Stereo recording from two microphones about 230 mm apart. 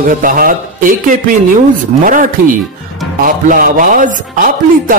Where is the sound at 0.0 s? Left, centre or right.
Right.